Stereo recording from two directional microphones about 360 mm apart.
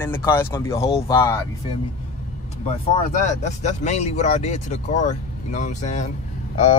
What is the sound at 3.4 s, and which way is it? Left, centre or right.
Speech, centre.